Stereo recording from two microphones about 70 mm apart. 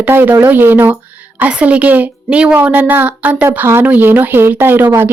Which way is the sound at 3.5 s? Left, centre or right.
Right.